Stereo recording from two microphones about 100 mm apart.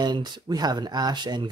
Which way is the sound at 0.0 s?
45° right (ahead or behind).